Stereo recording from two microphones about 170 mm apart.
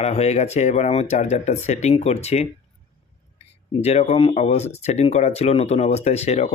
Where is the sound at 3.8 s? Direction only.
40° left (ahead or behind).